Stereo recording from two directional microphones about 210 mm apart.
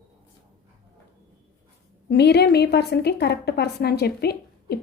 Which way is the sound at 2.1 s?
50° left (ahead or behind).